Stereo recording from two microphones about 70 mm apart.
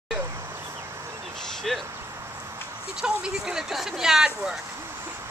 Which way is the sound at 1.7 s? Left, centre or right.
Centre.